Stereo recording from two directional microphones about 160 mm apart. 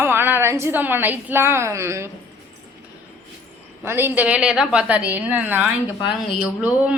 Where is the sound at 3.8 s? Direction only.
15° right (ahead or behind).